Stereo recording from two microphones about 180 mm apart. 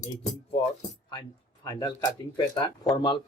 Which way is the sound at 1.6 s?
20° left (ahead or behind).